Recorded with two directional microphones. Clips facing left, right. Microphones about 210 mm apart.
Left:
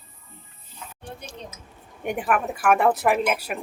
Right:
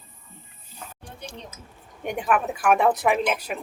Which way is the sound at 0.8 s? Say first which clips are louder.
Right 1 dB; 45° right (ahead or behind).